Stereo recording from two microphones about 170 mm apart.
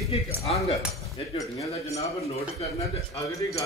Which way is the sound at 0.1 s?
35° left (ahead or behind).